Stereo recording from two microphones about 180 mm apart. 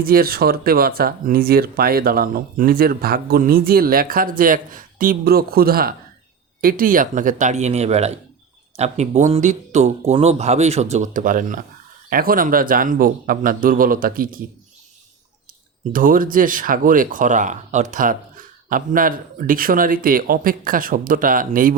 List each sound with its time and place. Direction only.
0.0 s a man's voice: 55° right (ahead or behind)
15.9 s speech: 50° right (ahead or behind)